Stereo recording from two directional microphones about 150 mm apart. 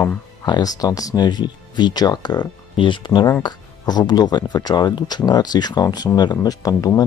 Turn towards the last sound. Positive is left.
turn(degrees=25)  # may be behind; listen again after turning